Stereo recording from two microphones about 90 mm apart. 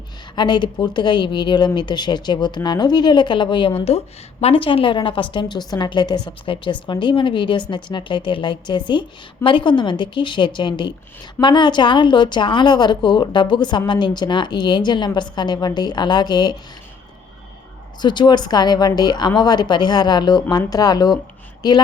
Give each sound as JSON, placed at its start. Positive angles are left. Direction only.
{"t": 0.3, "sound": "a woman's voice", "side_deg": 55}
{"t": 4.5, "sound": "a woman's voice", "side_deg": 85}
{"t": 18.0, "sound": "speech", "side_deg": 55}